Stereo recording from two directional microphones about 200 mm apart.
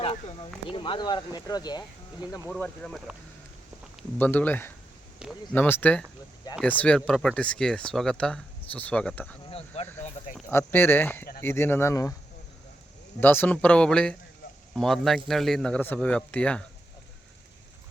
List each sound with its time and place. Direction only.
0.0 s a sound: 25° left (ahead or behind)
0.7 s speech: 25° left (ahead or behind)
2.5 s speech: 5° left (ahead or behind)
4.2 s speech: 10° left (ahead or behind)
5.2 s speech: 5° right (ahead or behind)
5.5 s speech: 10° left (ahead or behind)
9.5 s speech: 30° left (ahead or behind)
9.8 s speech: 10° left (ahead or behind)
13.1 s speech: 10° left (ahead or behind)